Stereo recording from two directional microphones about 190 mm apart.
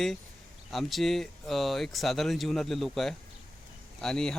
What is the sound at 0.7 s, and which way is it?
A man's voice, centre (ahead or behind).